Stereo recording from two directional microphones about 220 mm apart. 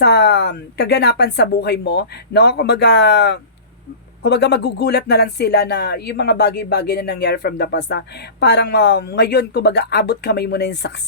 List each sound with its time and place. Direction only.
0.0 s speech: 50° left (ahead or behind)